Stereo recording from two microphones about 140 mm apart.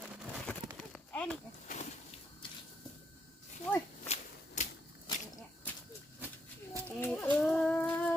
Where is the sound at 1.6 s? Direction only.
60° left (ahead or behind).